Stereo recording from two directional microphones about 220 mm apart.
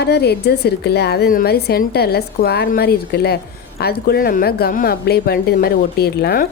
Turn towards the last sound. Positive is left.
turn(degrees=45)  # may be behind; listen again after turning